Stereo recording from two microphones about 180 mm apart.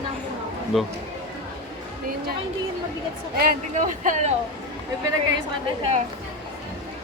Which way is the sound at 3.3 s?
50° right (ahead or behind).